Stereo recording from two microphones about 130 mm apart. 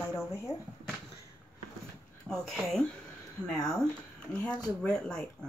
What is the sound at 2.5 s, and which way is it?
Speech, centre (ahead or behind).